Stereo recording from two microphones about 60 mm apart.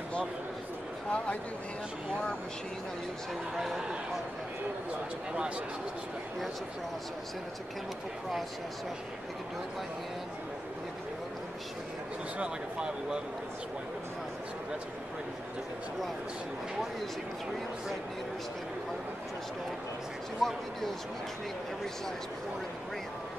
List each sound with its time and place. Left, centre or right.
1.1 s speech: centre
3.5 s a man's voice: centre
12.4 s speech: centre
20.4 s a man's voice: centre